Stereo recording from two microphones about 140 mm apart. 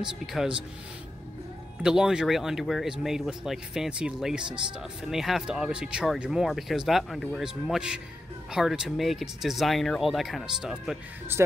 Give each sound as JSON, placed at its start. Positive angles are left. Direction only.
{"t": 0.3, "sound": "speech", "side_deg": -5}
{"t": 1.8, "sound": "speech", "side_deg": -5}
{"t": 11.3, "sound": "speech", "side_deg": -15}